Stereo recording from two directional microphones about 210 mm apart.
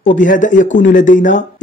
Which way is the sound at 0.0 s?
35° left (ahead or behind).